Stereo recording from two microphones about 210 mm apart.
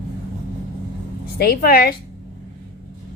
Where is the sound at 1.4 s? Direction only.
45° left (ahead or behind).